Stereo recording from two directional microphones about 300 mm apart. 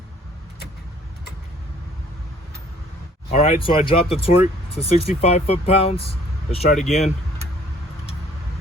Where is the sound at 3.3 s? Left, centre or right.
Centre.